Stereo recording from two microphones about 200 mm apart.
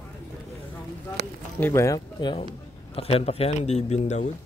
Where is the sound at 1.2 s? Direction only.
55° right (ahead or behind).